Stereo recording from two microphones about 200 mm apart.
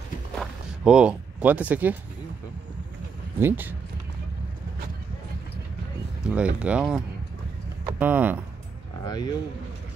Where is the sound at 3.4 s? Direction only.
10° right (ahead or behind).